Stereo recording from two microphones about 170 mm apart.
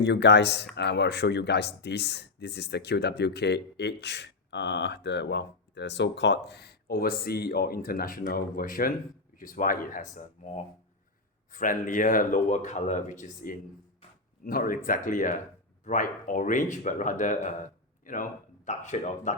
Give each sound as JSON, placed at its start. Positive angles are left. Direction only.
{"t": 0.0, "sound": "speech", "side_deg": 90}
{"t": 11.5, "sound": "speech", "side_deg": 50}